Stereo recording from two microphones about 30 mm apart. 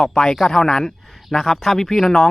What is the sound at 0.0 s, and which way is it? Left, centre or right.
A man's voice, centre.